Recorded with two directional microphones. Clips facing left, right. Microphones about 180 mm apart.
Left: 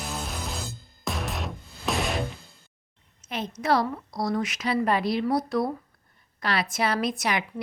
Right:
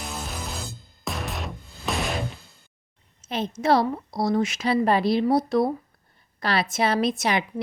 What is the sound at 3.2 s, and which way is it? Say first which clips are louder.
Speech: right 4 dB; 30° right (ahead or behind).